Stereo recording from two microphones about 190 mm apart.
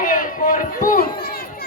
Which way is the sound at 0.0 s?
45° left (ahead or behind).